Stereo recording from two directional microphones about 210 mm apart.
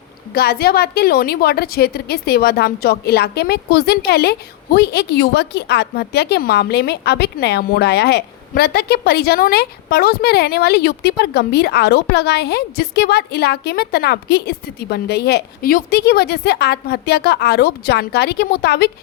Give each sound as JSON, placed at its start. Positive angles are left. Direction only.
{"t": 0.3, "sound": "a woman's voice", "side_deg": 50}